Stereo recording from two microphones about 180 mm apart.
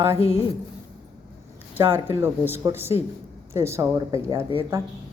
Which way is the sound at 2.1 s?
15° right (ahead or behind).